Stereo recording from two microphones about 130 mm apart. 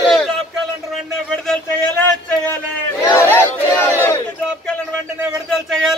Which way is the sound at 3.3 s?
15° left (ahead or behind).